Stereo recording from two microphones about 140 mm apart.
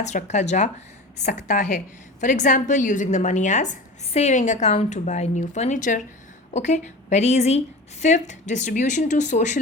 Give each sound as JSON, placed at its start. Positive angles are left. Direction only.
{"t": 0.0, "sound": "a woman's voice", "side_deg": 55}